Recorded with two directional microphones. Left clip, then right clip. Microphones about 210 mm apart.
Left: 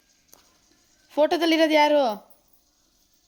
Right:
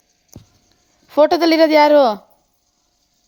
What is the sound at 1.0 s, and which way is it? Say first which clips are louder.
Speech: right 8 dB; 25° right (ahead or behind).